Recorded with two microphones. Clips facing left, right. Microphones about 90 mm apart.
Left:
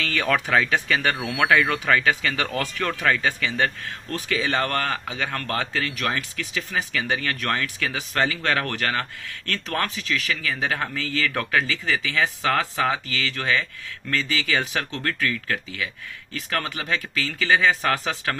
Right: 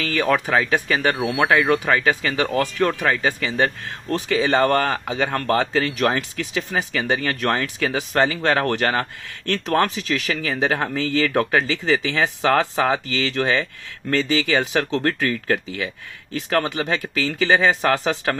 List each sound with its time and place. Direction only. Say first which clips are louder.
0.0 s speech: right 3 dB; 10° right (ahead or behind); by 6.8 s 35° right (ahead or behind)
6.9 s speech: right 4 dB; 25° right (ahead or behind)
14.7 s speech: right 7 dB; 30° right (ahead or behind)
16.9 s speech: right 4 dB; 25° right (ahead or behind)